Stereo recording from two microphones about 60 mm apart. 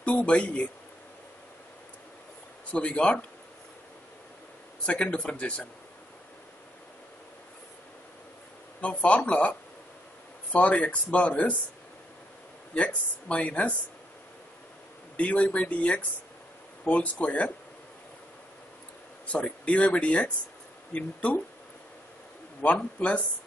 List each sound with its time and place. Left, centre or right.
0.0 s speech: left
2.7 s speech: centre
4.8 s speech: centre
8.8 s speech: left
12.7 s speech: left
15.1 s speech: left
19.3 s speech: left
22.7 s speech: left